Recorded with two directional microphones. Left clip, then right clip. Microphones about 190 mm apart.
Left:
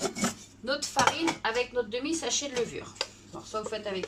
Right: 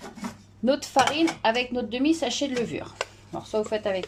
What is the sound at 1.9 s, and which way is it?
Speech, 45° right (ahead or behind).